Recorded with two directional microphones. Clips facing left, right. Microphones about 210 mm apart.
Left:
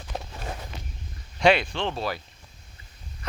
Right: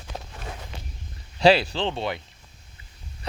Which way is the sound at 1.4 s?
35° right (ahead or behind).